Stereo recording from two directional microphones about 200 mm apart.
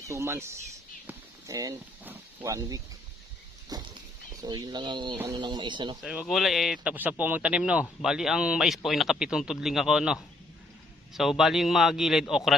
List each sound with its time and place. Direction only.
0.1 s speech: 15° right (ahead or behind)
1.0 s a sound: 15° right (ahead or behind)
3.7 s speech: 20° right (ahead or behind)
5.1 s speech: 10° right (ahead or behind)
5.4 s speech: 20° right (ahead or behind)
6.0 s speech: centre (ahead or behind)